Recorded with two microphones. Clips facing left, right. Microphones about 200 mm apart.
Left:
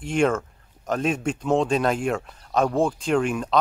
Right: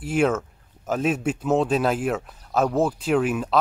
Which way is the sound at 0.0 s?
5° right (ahead or behind).